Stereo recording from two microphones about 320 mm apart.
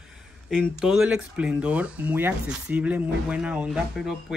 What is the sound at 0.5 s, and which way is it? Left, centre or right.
Speech, centre.